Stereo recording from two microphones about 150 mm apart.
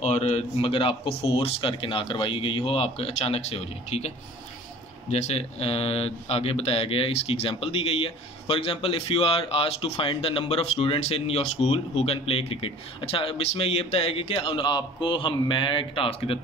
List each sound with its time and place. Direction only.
0.0 s speech: 45° left (ahead or behind)
5.1 s speech: 40° left (ahead or behind)